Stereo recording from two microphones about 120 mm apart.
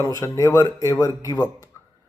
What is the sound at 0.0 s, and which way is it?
Speech, 25° left (ahead or behind).